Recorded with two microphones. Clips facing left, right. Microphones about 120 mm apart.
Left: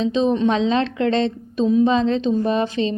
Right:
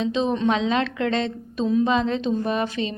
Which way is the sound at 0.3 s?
25° left (ahead or behind).